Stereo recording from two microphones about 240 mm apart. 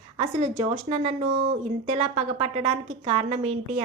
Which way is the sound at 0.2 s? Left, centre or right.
Right.